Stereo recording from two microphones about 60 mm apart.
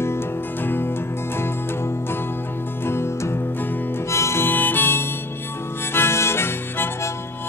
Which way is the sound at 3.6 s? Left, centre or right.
Left.